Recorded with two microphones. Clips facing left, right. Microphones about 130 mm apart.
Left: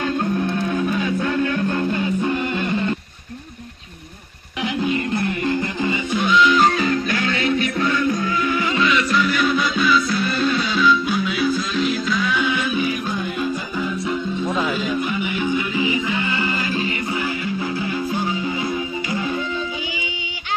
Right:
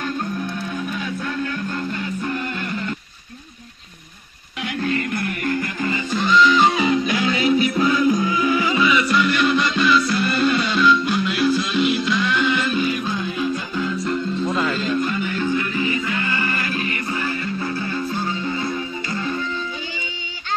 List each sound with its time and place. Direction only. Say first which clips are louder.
0.2 s music: left 5 dB; 35° left (ahead or behind)
0.9 s music: left 5 dB; 60° left (ahead or behind)
1.8 s music: left 5 dB; 35° left (ahead or behind)
2.3 s music: left 4 dB; 25° left (ahead or behind)
4.6 s music: left 2 dB; 20° left (ahead or behind)
6.1 s music: right 1 dB; 5° left (ahead or behind)
6.7 s music: right 1 dB; 10° right (ahead or behind); by 19.4 s 15° left (ahead or behind)